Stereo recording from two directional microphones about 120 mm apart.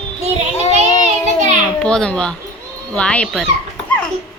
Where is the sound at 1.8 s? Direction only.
5° left (ahead or behind).